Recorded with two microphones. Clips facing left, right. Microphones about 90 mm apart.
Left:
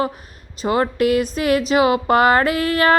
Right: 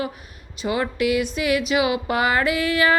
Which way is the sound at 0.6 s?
45° left (ahead or behind).